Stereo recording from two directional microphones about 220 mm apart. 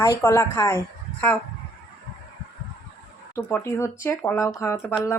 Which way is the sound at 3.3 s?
10° left (ahead or behind).